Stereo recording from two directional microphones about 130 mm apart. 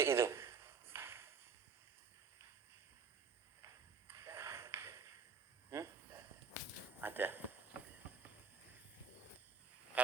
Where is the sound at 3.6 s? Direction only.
20° right (ahead or behind).